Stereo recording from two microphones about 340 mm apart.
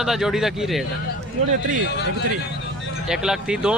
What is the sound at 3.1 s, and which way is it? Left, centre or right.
Speech, centre.